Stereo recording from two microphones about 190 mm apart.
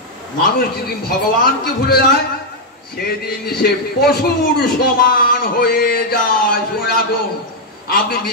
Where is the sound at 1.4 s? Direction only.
55° left (ahead or behind).